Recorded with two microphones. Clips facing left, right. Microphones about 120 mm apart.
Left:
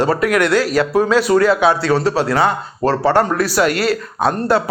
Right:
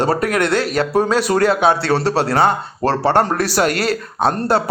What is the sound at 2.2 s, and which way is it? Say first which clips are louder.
A man's voice: right 1 dB; 30° right (ahead or behind).